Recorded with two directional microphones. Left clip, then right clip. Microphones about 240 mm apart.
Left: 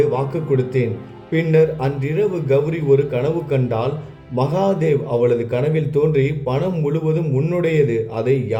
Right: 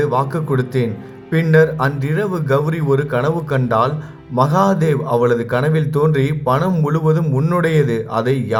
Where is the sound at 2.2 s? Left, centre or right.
Centre.